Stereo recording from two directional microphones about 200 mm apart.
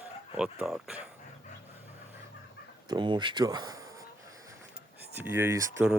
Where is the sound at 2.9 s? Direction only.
20° right (ahead or behind).